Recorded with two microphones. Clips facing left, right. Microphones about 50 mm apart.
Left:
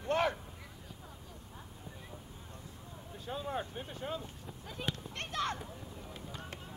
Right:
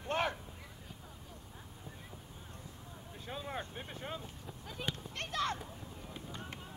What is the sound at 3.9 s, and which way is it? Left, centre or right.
Vehicle, right.